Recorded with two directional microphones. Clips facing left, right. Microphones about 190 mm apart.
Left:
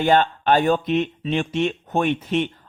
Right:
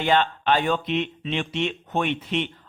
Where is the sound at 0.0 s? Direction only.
45° left (ahead or behind).